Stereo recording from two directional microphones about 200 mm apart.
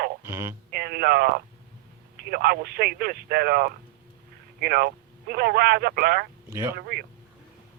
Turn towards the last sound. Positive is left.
turn(degrees=-50)  # may be behind; listen again after turning